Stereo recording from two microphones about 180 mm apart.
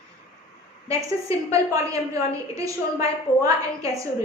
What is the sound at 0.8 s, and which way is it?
A woman's voice, 15° right (ahead or behind).